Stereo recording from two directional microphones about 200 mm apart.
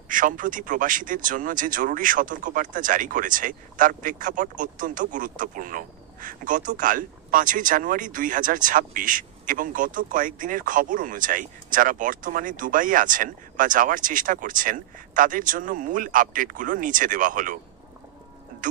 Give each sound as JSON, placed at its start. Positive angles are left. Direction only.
{"t": 0.1, "sound": "speech", "side_deg": -40}